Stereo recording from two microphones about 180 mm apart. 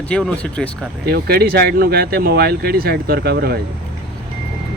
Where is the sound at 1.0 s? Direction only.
60° right (ahead or behind).